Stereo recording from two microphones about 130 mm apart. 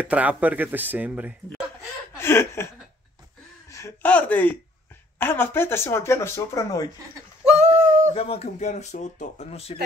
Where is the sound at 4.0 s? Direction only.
10° left (ahead or behind).